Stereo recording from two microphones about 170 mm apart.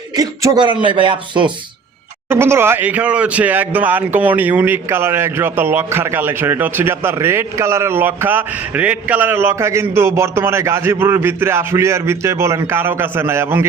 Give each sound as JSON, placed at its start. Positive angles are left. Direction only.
{"t": 0.2, "sound": "speech", "side_deg": -25}
{"t": 2.3, "sound": "speech", "side_deg": -15}